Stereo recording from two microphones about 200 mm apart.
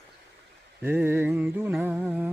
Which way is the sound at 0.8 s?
10° right (ahead or behind).